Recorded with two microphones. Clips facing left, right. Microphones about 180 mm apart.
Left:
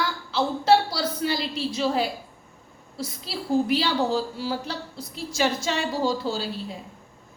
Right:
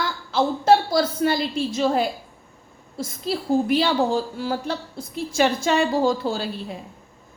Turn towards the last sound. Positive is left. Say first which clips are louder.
# right 4 dB
turn(degrees=-55)  # may be behind; listen again after turning